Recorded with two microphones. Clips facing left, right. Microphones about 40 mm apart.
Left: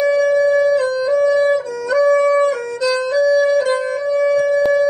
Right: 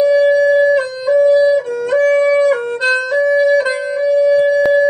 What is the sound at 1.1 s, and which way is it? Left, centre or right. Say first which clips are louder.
Music: right 5 dB; left.